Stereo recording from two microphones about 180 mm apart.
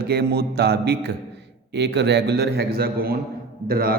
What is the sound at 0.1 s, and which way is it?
A man's voice, 65° right (ahead or behind).